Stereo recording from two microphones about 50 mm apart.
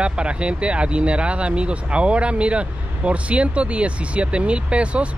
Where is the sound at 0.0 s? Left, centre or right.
Right.